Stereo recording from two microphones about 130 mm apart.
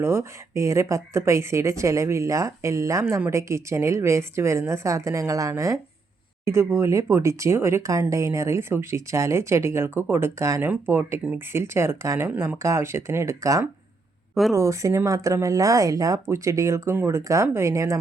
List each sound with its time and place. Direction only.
0.0 s speech: 20° right (ahead or behind)